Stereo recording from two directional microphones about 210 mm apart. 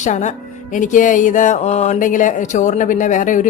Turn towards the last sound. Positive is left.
turn(degrees=40)  # may be behind; listen again after turning